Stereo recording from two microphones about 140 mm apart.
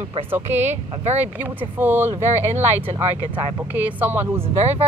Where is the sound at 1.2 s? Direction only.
15° right (ahead or behind).